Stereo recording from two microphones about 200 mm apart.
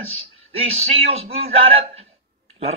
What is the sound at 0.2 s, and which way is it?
Speech, 30° right (ahead or behind).